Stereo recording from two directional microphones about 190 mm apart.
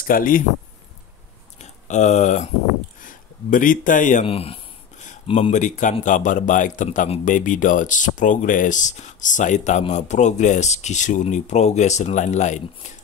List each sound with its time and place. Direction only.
0.0 s speech: 45° left (ahead or behind)
1.6 s speech: 40° left (ahead or behind)